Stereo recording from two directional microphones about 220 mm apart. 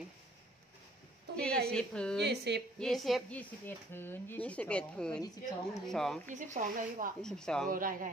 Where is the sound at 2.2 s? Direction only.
50° right (ahead or behind).